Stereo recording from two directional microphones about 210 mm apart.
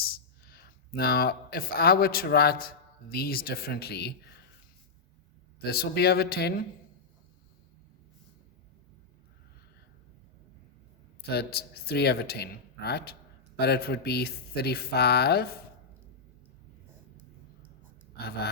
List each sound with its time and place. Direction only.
0.5 s speech: 45° left (ahead or behind)
5.6 s speech: 45° left (ahead or behind)
11.3 s speech: 50° left (ahead or behind)
18.2 s speech: 50° left (ahead or behind)